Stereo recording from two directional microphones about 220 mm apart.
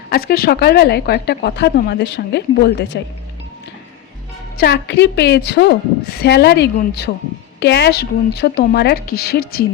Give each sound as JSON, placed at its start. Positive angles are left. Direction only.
{"t": 0.1, "sound": "a woman's voice", "side_deg": 45}
{"t": 4.5, "sound": "a woman's voice", "side_deg": 50}